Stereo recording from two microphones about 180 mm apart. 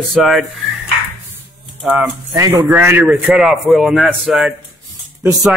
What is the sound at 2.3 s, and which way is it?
A man's voice, 20° right (ahead or behind).